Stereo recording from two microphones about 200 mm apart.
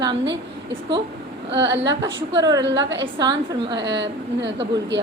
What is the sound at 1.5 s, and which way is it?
Speech, 60° right (ahead or behind).